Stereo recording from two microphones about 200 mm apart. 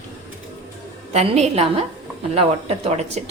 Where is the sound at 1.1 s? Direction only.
35° right (ahead or behind).